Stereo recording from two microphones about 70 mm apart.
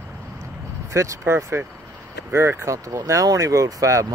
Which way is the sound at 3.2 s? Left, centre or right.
Right.